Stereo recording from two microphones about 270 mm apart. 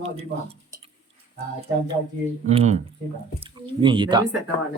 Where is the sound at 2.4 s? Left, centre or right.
Right.